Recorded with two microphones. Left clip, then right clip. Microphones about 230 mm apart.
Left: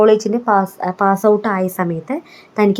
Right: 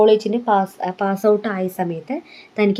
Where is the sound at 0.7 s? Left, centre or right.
Centre.